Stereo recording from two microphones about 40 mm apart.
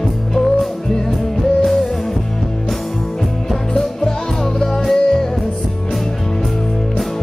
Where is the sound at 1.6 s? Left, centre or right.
Centre.